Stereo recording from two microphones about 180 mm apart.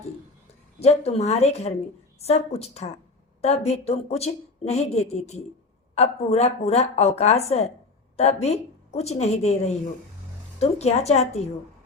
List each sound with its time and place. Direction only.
0.8 s a woman's voice: 35° left (ahead or behind)
10.6 s a woman's voice: 35° left (ahead or behind)